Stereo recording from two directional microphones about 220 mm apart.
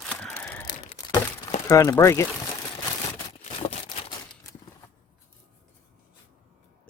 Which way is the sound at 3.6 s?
25° left (ahead or behind).